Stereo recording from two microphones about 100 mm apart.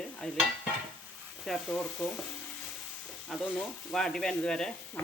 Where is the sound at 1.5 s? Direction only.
Centre (ahead or behind).